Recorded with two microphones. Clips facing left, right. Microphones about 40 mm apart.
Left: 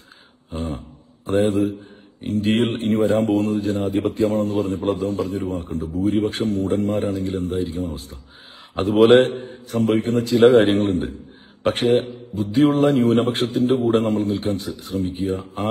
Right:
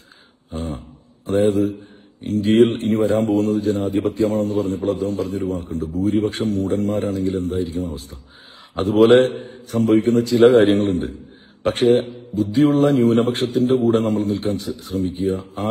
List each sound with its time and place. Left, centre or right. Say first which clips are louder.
0.7 s a sound: even; left
2.4 s a man's voice: right 6 dB; left
8.7 s a man's voice: even; left